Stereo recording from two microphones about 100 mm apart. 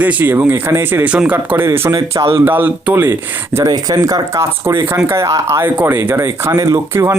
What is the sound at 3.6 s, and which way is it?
Speech, 40° right (ahead or behind).